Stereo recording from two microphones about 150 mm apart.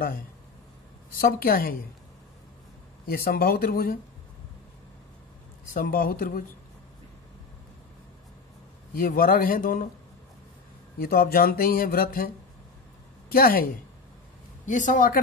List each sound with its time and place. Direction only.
1.1 s a woman's voice: 80° left
3.1 s speech: 85° left
5.7 s speech: 70° left (ahead or behind)
8.9 s speech: 70° left (ahead or behind)
11.0 s speech: 80° left
13.3 s a woman's voice: 80° left
14.7 s a woman's voice: 60° left (ahead or behind)